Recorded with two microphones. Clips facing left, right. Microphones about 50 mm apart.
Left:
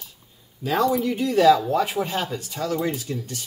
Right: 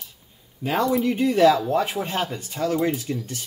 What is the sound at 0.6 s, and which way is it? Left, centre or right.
Speech, right.